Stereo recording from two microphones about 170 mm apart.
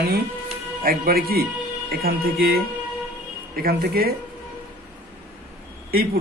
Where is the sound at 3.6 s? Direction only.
60° right (ahead or behind).